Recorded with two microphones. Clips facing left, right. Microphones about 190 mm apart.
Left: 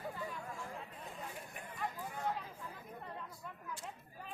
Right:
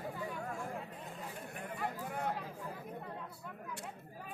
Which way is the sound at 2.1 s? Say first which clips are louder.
Right 1 dB; 60° right (ahead or behind).